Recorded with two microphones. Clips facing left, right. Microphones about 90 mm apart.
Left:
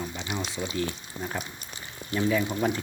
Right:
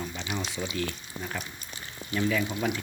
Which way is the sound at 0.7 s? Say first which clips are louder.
Left 2 dB; 25° left (ahead or behind).